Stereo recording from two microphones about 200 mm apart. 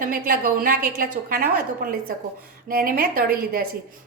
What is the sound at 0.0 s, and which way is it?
A woman's voice, 45° right (ahead or behind).